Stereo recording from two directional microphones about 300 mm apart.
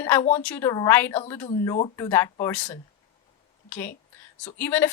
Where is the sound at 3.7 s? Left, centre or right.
Centre.